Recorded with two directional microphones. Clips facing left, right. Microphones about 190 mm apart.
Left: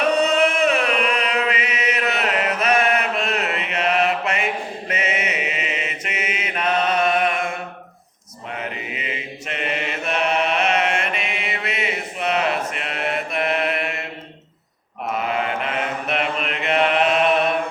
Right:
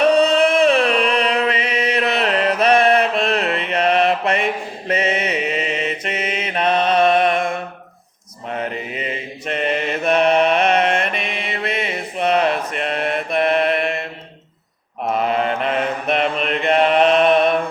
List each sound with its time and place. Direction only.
0.1 s chant: 30° right (ahead or behind)
3.7 s mantra: 35° right (ahead or behind)
8.5 s mantra: 40° right (ahead or behind)
15.2 s mantra: 40° right (ahead or behind)